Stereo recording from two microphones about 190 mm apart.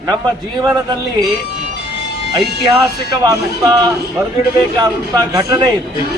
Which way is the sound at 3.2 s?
20° right (ahead or behind).